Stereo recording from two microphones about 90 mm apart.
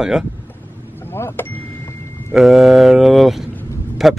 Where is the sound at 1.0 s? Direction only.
25° left (ahead or behind).